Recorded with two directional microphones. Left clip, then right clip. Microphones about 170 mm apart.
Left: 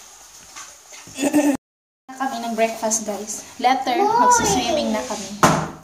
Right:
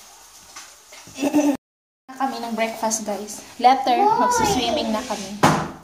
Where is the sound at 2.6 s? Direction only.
20° right (ahead or behind).